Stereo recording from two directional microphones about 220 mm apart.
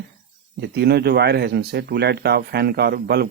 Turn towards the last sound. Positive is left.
turn(degrees=-45)  # may be behind; listen again after turning